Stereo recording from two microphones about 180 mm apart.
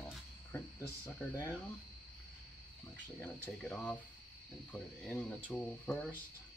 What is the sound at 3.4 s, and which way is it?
Speech, 10° left (ahead or behind).